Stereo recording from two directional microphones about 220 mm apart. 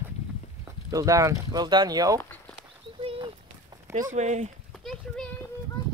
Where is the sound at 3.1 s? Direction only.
25° right (ahead or behind).